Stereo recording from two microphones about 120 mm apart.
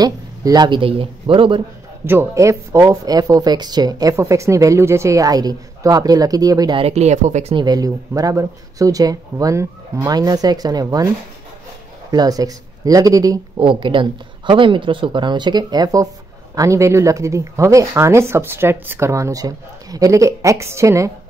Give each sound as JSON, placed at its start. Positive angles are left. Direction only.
{"t": 0.0, "sound": "speech", "side_deg": -30}
{"t": 2.0, "sound": "speech", "side_deg": -20}
{"t": 6.8, "sound": "speech", "side_deg": -65}
{"t": 7.5, "sound": "speech", "side_deg": -35}
{"t": 12.1, "sound": "speech", "side_deg": -30}
{"t": 13.6, "sound": "speech", "side_deg": -45}